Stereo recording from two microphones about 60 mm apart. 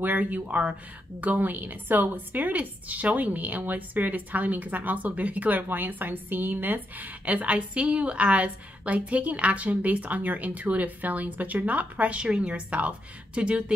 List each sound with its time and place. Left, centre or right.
0.0 s a woman's voice: right